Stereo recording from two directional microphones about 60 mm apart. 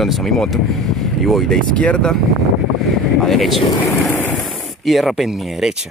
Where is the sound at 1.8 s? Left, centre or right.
Centre.